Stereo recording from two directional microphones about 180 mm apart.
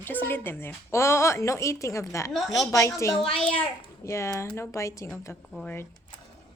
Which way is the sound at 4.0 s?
15° left (ahead or behind).